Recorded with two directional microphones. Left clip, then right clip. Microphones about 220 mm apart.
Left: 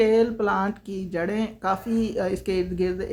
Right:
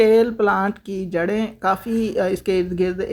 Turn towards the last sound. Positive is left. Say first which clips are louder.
# right 4 dB
turn(degrees=-25)  # may be behind; listen again after turning